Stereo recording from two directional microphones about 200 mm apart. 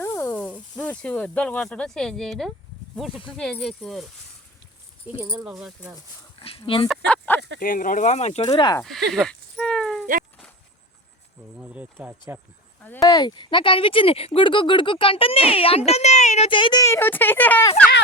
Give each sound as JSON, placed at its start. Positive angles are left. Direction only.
{"t": 0.0, "sound": "speech", "side_deg": 10}
{"t": 5.5, "sound": "speech", "side_deg": -5}
{"t": 6.4, "sound": "speech", "side_deg": 25}
{"t": 6.8, "sound": "speech", "side_deg": 5}
{"t": 7.6, "sound": "speech", "side_deg": 45}
{"t": 9.1, "sound": "a sound", "side_deg": 5}
{"t": 11.5, "sound": "speech", "side_deg": -5}
{"t": 12.8, "sound": "speech", "side_deg": 15}